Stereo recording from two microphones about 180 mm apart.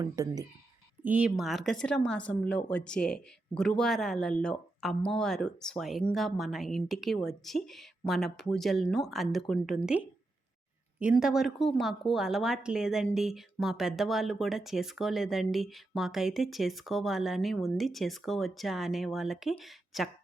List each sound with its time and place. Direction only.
0.0 s speech: 20° right (ahead or behind)
1.0 s speech: 5° right (ahead or behind)
11.0 s speech: 5° right (ahead or behind)